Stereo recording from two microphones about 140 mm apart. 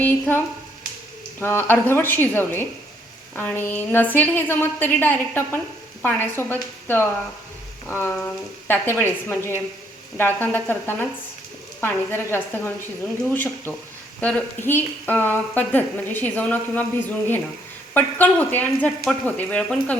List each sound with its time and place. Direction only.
0.0 s a woman's voice: 15° left (ahead or behind)